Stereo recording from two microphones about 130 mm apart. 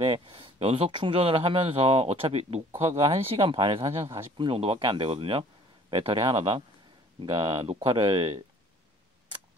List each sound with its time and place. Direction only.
0.0 s speech: 40° right (ahead or behind)